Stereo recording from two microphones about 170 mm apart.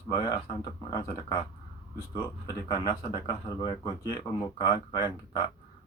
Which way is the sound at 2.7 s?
25° left (ahead or behind).